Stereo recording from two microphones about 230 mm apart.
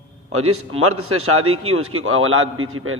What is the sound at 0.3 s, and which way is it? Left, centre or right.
A man's voice, right.